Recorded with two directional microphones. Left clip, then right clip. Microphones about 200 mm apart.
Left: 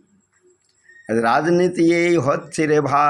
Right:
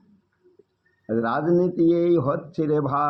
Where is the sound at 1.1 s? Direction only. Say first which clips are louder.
Left 7 dB; 35° left (ahead or behind).